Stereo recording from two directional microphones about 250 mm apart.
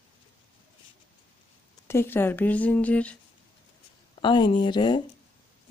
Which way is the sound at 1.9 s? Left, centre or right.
Centre.